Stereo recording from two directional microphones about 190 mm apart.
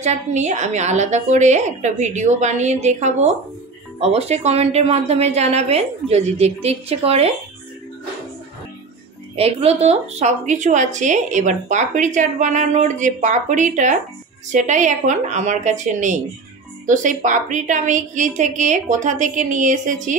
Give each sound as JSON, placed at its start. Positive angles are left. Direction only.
{"t": 0.0, "sound": "a woman's voice", "side_deg": -35}
{"t": 9.3, "sound": "a woman's voice", "side_deg": -30}